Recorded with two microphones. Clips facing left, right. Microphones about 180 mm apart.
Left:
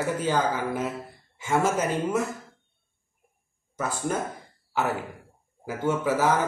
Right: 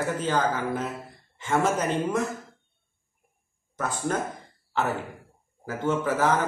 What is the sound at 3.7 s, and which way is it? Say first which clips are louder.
Speech: even; 10° left (ahead or behind).